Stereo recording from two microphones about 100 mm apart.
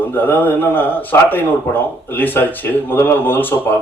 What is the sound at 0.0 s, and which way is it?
Speech, 20° left (ahead or behind).